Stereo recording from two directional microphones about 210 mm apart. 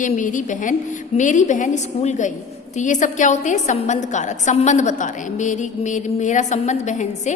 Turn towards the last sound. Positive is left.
turn(degrees=35)  # may be behind; listen again after turning